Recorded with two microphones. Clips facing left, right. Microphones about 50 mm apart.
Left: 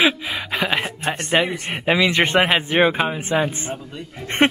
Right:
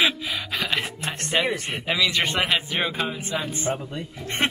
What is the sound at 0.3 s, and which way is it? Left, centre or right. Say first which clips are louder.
A man's voice: left 4 dB; left.